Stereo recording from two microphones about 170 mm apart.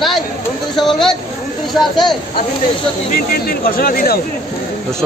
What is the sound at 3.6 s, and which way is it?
Speech, 60° left (ahead or behind).